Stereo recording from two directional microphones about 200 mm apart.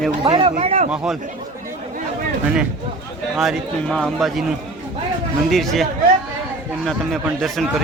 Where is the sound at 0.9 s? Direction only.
Centre (ahead or behind).